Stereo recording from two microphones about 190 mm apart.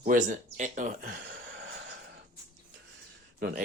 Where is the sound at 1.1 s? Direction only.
55° right (ahead or behind).